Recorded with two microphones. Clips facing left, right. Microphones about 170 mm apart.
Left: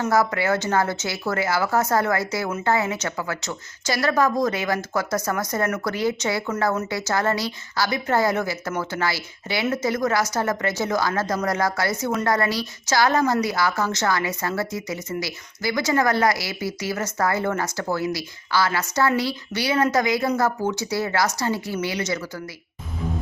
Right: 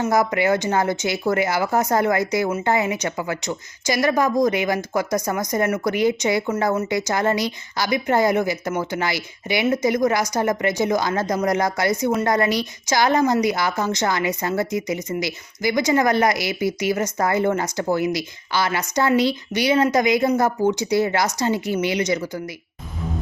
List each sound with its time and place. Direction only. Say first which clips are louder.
0.0 s a woman's voice: right 2 dB; 15° right (ahead or behind)